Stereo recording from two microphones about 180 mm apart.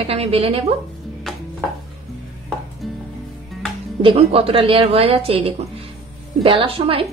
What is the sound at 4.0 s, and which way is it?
A woman's voice, 30° right (ahead or behind).